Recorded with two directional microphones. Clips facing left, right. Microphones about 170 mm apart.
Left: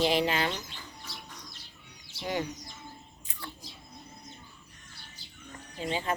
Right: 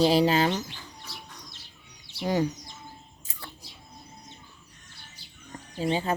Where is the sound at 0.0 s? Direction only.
35° right (ahead or behind).